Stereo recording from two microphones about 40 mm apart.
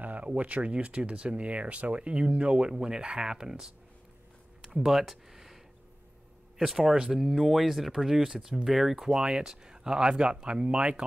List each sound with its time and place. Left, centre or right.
0.0 s speech: right; by 5.6 s centre
6.6 s speech: centre
9.1 s speech: centre